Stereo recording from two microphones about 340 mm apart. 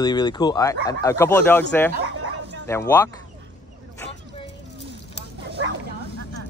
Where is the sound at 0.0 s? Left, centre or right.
Centre.